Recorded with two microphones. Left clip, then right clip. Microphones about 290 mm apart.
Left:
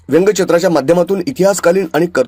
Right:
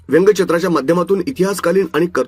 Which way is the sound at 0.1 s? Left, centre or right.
Centre.